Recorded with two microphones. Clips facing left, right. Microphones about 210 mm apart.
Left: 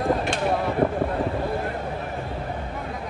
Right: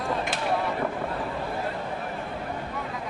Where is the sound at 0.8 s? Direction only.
30° left (ahead or behind).